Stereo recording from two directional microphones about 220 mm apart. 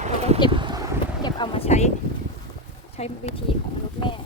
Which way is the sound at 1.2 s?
25° left (ahead or behind).